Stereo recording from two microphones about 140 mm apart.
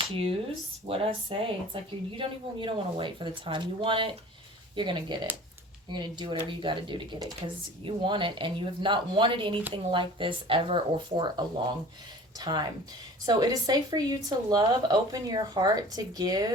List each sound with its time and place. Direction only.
0.0 s speech: 40° right (ahead or behind)